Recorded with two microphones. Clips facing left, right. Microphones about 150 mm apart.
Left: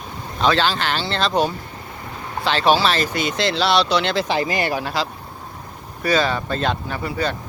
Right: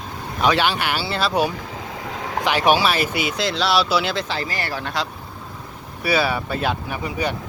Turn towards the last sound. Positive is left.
turn(degrees=-15)  # may be behind; listen again after turning